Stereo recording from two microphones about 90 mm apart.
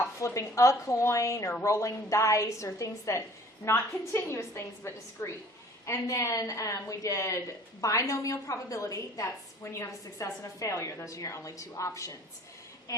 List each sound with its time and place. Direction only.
0.2 s a woman's voice: 35° left (ahead or behind)